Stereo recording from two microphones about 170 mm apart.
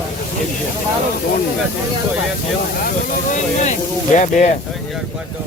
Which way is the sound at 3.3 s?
45° left (ahead or behind).